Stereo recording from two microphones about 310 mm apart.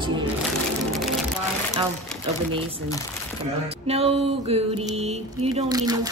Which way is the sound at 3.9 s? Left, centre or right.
Centre.